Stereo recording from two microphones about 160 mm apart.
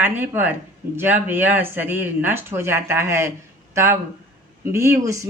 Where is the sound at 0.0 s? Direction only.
10° right (ahead or behind).